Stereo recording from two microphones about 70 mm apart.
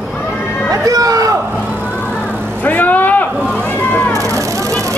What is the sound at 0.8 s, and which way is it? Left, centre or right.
Speech, right.